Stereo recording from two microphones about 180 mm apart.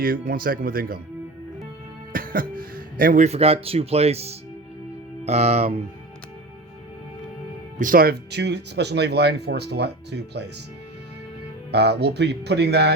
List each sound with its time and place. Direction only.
0.0 s speech: 55° right (ahead or behind)
2.1 s speech: 50° right (ahead or behind)
3.2 s speech: 35° right (ahead or behind)
7.8 s speech: 50° right (ahead or behind); by 10.4 s 70° right (ahead or behind)
11.7 s speech: 70° right (ahead or behind)